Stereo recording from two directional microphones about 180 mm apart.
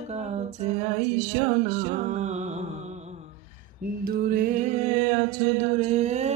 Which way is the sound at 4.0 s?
55° right (ahead or behind).